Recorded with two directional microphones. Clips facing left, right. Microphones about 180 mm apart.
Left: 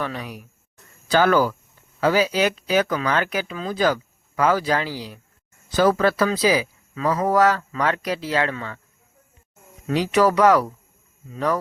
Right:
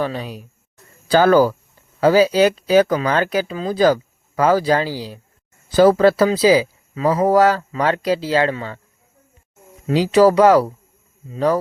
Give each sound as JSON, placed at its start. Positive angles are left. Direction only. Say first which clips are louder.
{"t": 0.0, "sound": "speech", "louder": "right 5 dB", "side_deg": -30}
{"t": 9.8, "sound": "speech", "louder": "right 6 dB", "side_deg": -30}